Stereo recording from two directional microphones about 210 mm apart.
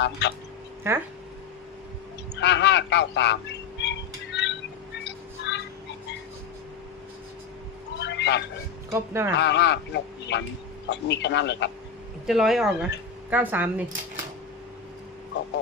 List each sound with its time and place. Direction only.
0.0 s speech: 55° left (ahead or behind)
0.9 s speech: 10° right (ahead or behind)
2.3 s speech: 55° left (ahead or behind)
3.8 s music: 55° left (ahead or behind)
5.5 s a sound: 55° left (ahead or behind)
8.0 s a sound: 55° left (ahead or behind)
8.9 s speech: 10° right (ahead or behind)
9.4 s speech: 55° left (ahead or behind)
12.2 s speech: centre (ahead or behind)